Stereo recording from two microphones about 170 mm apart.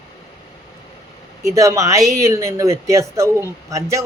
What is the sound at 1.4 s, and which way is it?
Speech, 20° right (ahead or behind).